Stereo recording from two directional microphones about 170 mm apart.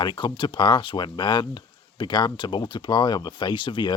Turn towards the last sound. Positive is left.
turn(degrees=25)  # may be behind; listen again after turning